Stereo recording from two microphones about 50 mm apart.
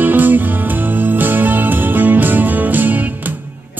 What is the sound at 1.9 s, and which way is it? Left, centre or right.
Music, right.